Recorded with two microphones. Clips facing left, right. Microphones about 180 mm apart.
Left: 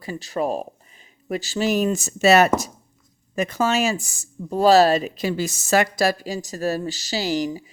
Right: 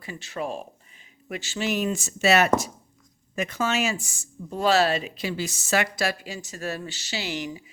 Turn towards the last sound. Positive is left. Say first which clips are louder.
# left 8 dB
turn(degrees=35)  # may be behind; listen again after turning